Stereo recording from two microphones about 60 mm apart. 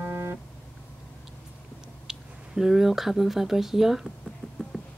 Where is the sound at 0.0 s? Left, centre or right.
Right.